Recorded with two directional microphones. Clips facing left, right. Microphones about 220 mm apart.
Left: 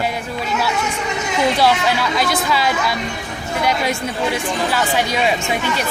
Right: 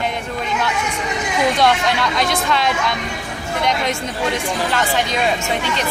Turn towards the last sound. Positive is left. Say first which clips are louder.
# left 1 dB
turn(degrees=10)  # may be behind; listen again after turning